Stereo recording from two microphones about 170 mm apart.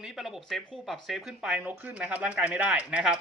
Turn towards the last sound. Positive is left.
turn(degrees=-5)  # may be behind; listen again after turning